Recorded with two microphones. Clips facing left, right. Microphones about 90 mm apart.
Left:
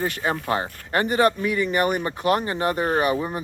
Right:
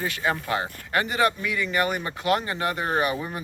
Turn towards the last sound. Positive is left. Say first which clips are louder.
# left 3 dB
turn(degrees=25)  # may be behind; listen again after turning